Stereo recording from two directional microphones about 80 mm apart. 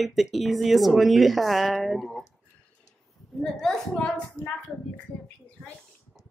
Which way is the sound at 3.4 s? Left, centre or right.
Centre.